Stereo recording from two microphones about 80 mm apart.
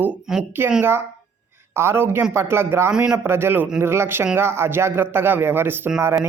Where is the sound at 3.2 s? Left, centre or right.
Right.